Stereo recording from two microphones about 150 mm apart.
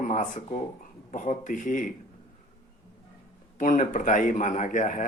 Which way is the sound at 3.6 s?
60° left (ahead or behind).